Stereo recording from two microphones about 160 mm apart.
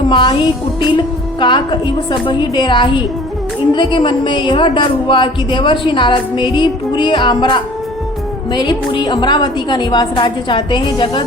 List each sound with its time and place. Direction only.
0.1 s a woman's voice: 30° left (ahead or behind)